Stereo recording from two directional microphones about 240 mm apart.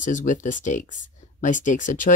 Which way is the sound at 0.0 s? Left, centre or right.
Left.